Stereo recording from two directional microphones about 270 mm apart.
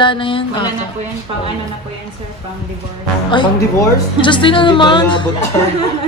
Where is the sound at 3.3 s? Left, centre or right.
Centre.